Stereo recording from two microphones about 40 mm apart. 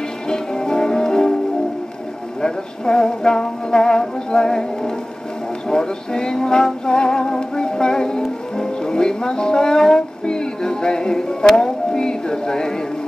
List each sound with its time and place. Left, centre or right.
0.3 s music: centre
2.4 s music: centre